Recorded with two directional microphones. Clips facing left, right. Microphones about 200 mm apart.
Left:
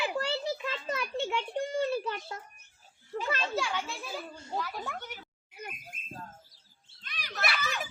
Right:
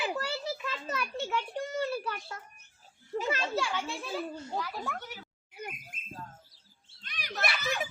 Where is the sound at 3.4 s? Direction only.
5° right (ahead or behind).